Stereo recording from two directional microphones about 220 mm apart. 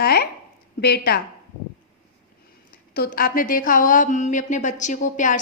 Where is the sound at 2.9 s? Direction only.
40° left (ahead or behind).